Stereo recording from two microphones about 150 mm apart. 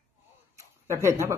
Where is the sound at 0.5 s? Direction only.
20° right (ahead or behind).